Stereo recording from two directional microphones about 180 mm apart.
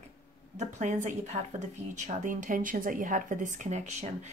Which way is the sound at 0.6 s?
40° right (ahead or behind).